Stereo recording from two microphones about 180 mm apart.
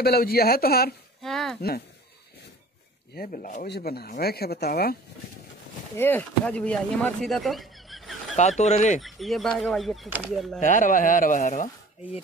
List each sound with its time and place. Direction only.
0.0 s speech: 60° left (ahead or behind)
1.2 s speech: centre (ahead or behind)
3.2 s speech: 45° left (ahead or behind)
3.6 s speech: 65° left (ahead or behind)
5.9 s speech: 10° left (ahead or behind)
8.4 s speech: 40° left (ahead or behind)
9.0 s speech: centre (ahead or behind)
10.6 s speech: 45° left (ahead or behind)